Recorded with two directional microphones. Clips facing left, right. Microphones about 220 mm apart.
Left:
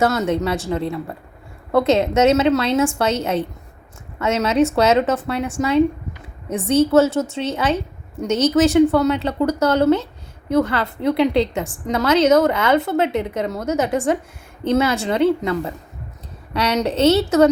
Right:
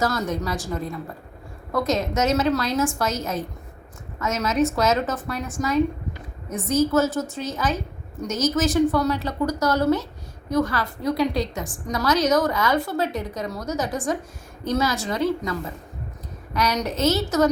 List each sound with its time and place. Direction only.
0.0 s a woman's voice: 25° left (ahead or behind)
1.7 s a woman's voice: 30° left (ahead or behind)
16.6 s a woman's voice: 30° left (ahead or behind)